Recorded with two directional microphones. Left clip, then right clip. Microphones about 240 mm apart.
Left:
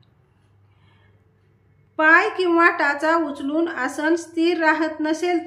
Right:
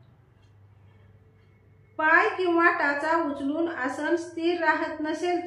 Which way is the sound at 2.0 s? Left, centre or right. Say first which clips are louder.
Left 6 dB; left.